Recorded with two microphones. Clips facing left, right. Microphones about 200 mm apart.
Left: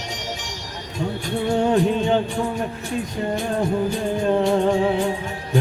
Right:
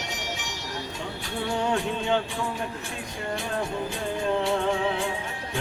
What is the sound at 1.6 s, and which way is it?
Music, 40° left (ahead or behind).